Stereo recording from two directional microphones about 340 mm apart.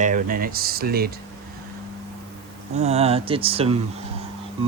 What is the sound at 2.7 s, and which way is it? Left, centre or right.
Speech, centre.